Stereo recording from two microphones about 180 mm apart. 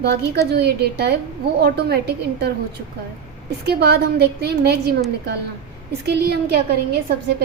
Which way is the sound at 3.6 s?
65° right (ahead or behind).